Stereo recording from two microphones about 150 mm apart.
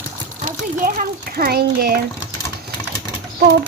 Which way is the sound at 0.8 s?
75° right (ahead or behind).